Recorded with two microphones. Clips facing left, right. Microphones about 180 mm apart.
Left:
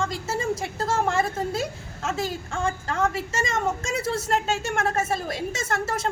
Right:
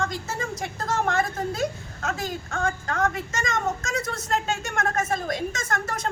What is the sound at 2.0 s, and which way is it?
A woman's voice, 30° left (ahead or behind).